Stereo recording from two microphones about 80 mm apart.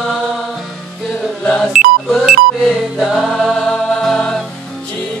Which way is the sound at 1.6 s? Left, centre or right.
Centre.